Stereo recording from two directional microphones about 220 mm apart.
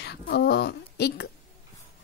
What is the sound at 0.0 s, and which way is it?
A woman's voice, 50° left (ahead or behind).